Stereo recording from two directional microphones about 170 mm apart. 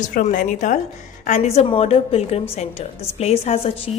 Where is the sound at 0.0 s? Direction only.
50° left (ahead or behind).